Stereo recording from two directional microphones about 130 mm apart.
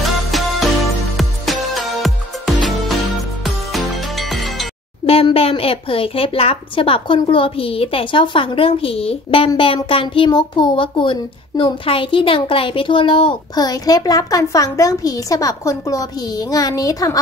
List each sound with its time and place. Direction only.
0.3 s music: centre (ahead or behind)
5.0 s a child's voice: 45° left (ahead or behind)
13.7 s a child's voice: 30° left (ahead or behind)